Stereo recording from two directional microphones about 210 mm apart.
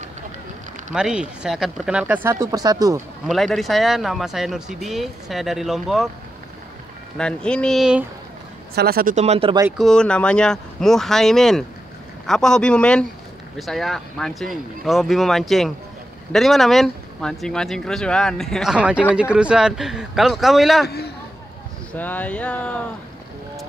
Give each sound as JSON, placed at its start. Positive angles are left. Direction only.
{"t": 0.9, "sound": "speech", "side_deg": -5}
{"t": 3.3, "sound": "speech", "side_deg": 0}
{"t": 7.2, "sound": "speech", "side_deg": 5}
{"t": 8.7, "sound": "speech", "side_deg": -45}
{"t": 9.8, "sound": "speech", "side_deg": 5}
{"t": 21.9, "sound": "a sound", "side_deg": 10}